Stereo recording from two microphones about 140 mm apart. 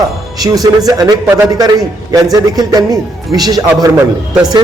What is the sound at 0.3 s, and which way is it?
A man's voice, 25° right (ahead or behind).